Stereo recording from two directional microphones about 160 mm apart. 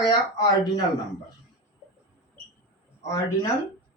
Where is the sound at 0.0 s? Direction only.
25° left (ahead or behind).